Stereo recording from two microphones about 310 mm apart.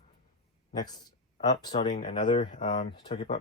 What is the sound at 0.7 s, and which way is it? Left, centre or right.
A man's voice, centre.